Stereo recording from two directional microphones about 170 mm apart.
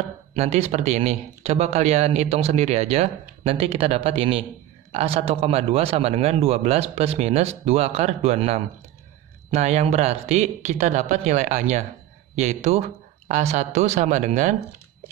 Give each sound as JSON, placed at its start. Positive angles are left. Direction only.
{"t": 0.4, "sound": "speech", "side_deg": -40}